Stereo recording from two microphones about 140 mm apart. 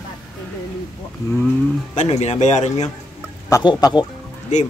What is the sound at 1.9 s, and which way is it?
Speech, 55° left (ahead or behind).